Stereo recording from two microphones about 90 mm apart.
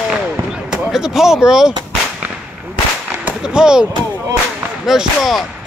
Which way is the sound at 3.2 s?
10° right (ahead or behind).